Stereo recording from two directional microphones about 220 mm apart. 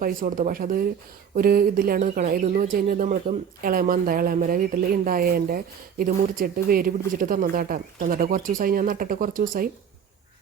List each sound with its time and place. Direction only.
0.0 s speech: 40° right (ahead or behind)